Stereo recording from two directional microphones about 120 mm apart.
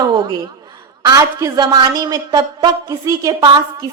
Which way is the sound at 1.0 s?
30° right (ahead or behind).